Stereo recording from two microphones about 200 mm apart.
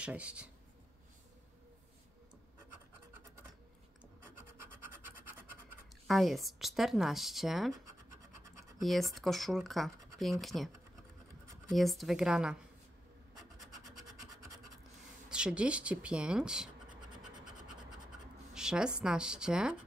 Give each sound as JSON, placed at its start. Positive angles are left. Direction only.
{"t": 0.0, "sound": "speech", "side_deg": -5}
{"t": 4.2, "sound": "scratch", "side_deg": -10}
{"t": 6.0, "sound": "speech", "side_deg": 0}
{"t": 8.8, "sound": "speech", "side_deg": 0}
{"t": 11.7, "sound": "speech", "side_deg": 0}
{"t": 13.9, "sound": "scratch", "side_deg": -20}
{"t": 15.2, "sound": "speech", "side_deg": -5}
{"t": 18.5, "sound": "speech", "side_deg": -5}